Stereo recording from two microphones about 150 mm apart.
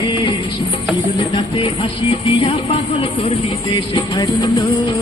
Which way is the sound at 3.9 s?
25° left (ahead or behind).